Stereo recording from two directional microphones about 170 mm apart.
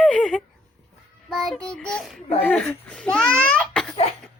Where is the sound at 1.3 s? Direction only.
Centre (ahead or behind).